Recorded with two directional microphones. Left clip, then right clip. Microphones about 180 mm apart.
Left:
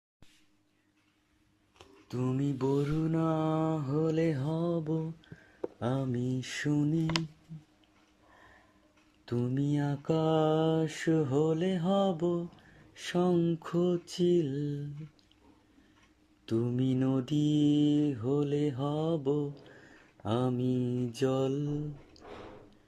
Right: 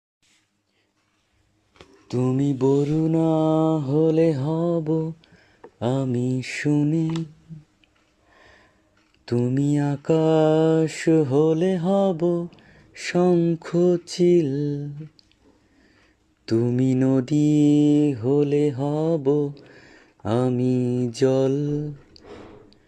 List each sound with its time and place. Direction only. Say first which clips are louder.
2.0 s mantra: right 10 dB; 30° right (ahead or behind)
9.2 s mantra: right 10 dB; 25° right (ahead or behind)
16.5 s mantra: right 10 dB; 25° right (ahead or behind)